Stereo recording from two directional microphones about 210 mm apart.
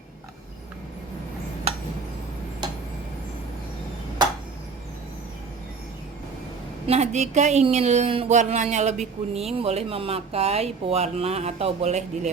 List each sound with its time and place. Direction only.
6.8 s a woman's voice: 30° right (ahead or behind)